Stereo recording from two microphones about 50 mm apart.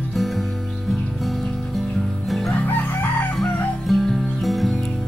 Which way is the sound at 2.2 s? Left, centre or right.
Centre.